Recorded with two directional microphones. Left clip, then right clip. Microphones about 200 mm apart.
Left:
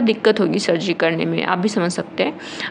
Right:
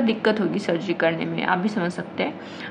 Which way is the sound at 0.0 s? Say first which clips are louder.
Left 5 dB; 45° left (ahead or behind).